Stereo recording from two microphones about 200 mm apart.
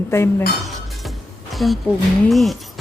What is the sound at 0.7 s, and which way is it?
Chink, centre (ahead or behind).